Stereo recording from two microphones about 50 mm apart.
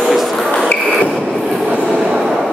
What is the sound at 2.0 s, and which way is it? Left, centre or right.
Train, centre.